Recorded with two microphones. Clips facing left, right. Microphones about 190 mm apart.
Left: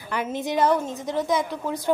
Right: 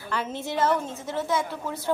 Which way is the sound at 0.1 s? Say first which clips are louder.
Left 4 dB; 15° left (ahead or behind).